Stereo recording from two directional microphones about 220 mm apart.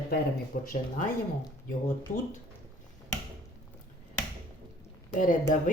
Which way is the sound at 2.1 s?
35° left (ahead or behind).